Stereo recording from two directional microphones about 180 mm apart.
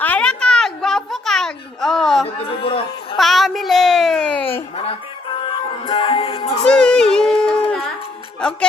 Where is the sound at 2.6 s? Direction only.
30° left (ahead or behind).